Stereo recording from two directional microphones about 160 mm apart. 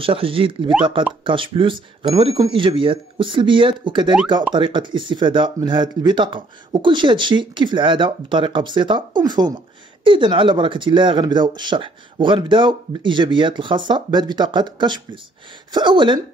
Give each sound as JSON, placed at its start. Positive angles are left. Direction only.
{"t": 0.0, "sound": "speech", "side_deg": -35}